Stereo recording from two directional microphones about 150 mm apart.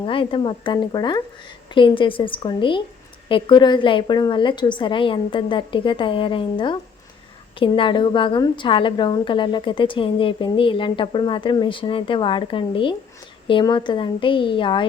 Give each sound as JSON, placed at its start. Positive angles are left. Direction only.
{"t": 0.0, "sound": "a woman's voice", "side_deg": 35}